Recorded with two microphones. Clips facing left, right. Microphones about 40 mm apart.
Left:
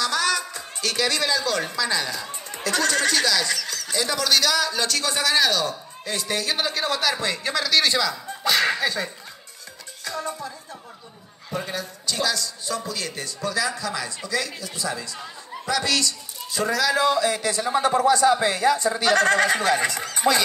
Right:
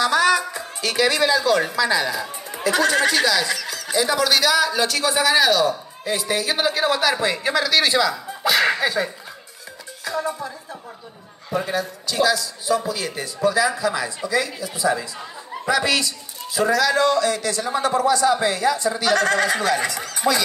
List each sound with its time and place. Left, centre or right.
0.0 s a woman's voice: centre
17.7 s speech: left